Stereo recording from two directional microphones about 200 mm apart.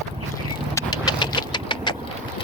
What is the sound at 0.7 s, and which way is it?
Vehicle, 15° left (ahead or behind).